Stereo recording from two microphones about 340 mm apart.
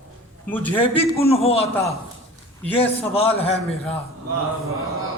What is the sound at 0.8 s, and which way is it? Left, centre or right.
Speech, centre.